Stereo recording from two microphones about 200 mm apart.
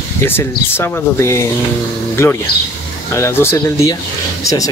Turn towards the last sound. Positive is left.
turn(degrees=15)  # may be behind; listen again after turning